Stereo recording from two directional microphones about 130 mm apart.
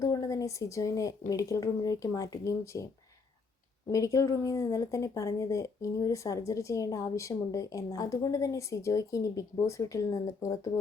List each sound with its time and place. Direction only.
0.0 s a sound: 25° left (ahead or behind)
1.3 s a woman's voice: 25° left (ahead or behind)
3.8 s a woman's voice: 25° left (ahead or behind)